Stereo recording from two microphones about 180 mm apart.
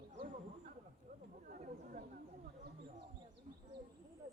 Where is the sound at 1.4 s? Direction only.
50° right (ahead or behind).